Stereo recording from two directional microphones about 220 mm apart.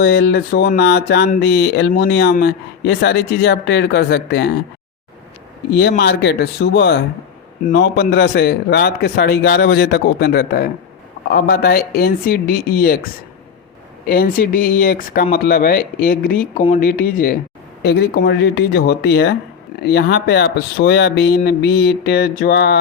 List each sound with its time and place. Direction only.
0.0 s speech: 50° left (ahead or behind)
6.0 s speech: 50° left (ahead or behind)
14.1 s speech: 40° left (ahead or behind)